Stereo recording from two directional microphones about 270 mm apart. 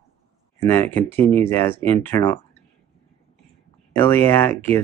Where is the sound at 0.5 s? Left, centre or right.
Centre.